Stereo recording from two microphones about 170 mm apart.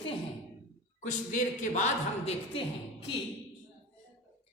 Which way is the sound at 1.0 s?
45° left (ahead or behind).